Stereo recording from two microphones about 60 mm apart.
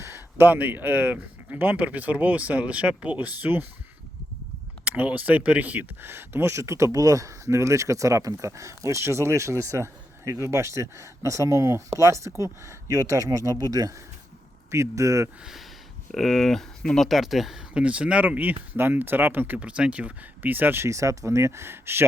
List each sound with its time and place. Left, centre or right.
0.0 s speech: right
4.9 s speech: right
14.7 s speech: right
16.1 s speech: centre
17.1 s speech: centre
17.7 s speech: right
20.4 s speech: right
20.8 s speech: right